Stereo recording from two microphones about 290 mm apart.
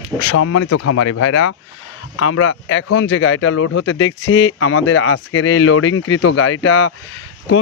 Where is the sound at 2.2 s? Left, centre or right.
Left.